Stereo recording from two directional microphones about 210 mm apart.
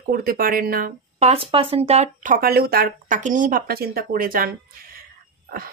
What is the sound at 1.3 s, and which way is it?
Speech, 25° right (ahead or behind).